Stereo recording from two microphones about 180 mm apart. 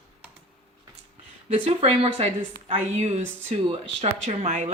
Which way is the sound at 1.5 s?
35° right (ahead or behind).